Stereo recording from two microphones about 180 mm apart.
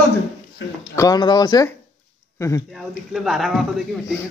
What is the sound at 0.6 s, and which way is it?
Speech, 90° left.